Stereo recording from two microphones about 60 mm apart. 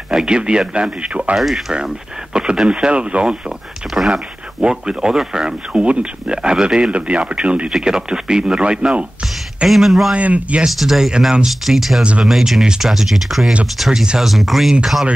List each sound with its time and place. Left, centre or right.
0.1 s speech: centre
1.3 s speech: centre
3.9 s speech: centre
7.7 s speech: centre
9.7 s speech: centre
10.1 s speech: right
10.6 s speech: centre
12.0 s speech: centre
12.3 s speech: centre